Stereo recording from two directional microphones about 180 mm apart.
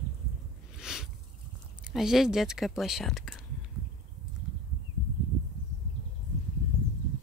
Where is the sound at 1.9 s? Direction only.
Centre (ahead or behind).